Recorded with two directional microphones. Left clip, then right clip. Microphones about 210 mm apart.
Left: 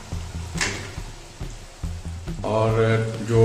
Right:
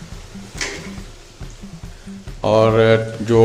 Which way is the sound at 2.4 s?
50° right (ahead or behind).